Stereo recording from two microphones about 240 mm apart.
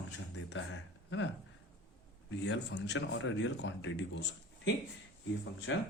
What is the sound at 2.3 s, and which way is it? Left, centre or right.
Speech, left.